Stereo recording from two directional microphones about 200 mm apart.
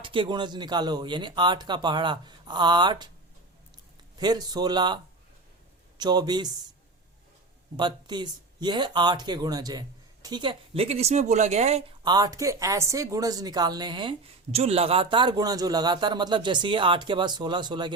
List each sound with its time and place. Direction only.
0.0 s speech: 25° right (ahead or behind)
4.2 s speech: 20° right (ahead or behind)
6.0 s speech: 20° right (ahead or behind)
7.8 s speech: 20° right (ahead or behind)